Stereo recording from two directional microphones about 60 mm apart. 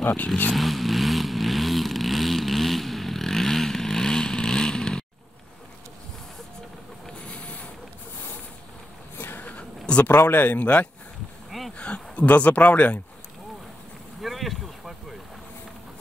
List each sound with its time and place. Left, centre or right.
0.0 s speech: left
0.5 s vehicle: centre
7.2 s vehicle: left
9.2 s a sound: left
10.0 s speech: left
14.2 s vehicle: centre